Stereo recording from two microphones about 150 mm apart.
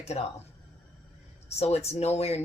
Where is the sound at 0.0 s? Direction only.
45° left (ahead or behind).